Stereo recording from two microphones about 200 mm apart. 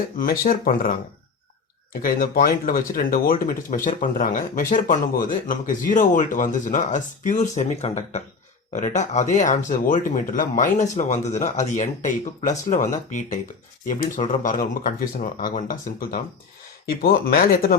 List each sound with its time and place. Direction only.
0.2 s speech: 45° left (ahead or behind)